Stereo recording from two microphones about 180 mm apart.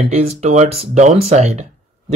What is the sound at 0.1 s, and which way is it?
Speech, 40° right (ahead or behind).